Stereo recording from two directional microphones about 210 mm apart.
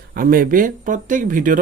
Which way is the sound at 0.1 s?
45° right (ahead or behind).